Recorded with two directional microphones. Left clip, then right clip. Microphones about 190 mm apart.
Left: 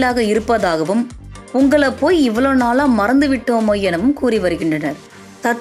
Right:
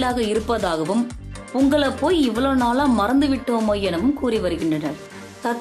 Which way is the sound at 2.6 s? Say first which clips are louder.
Left 4 dB; 30° left (ahead or behind).